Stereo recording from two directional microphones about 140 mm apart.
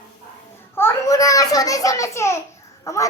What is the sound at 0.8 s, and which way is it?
A child's voice, 20° left (ahead or behind).